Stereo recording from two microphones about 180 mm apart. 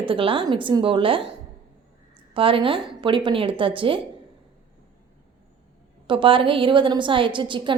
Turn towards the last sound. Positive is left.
turn(degrees=-25)  # may be behind; listen again after turning